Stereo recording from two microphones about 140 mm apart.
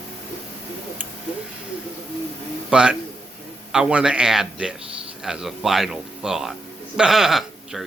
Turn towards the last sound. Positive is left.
turn(degrees=0)  # may be behind; listen again after turning